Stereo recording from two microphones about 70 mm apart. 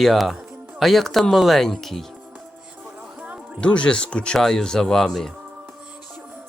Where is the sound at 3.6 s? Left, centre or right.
Centre.